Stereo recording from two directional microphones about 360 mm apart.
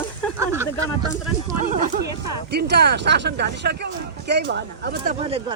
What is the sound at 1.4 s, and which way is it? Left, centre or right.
Speech, right.